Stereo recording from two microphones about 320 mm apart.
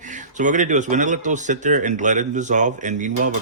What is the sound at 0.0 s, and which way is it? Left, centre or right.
Speech, right.